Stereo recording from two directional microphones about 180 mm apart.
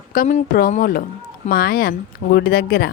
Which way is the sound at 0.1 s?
45° left (ahead or behind).